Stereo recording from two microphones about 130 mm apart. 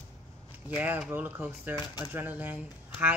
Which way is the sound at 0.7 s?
10° right (ahead or behind).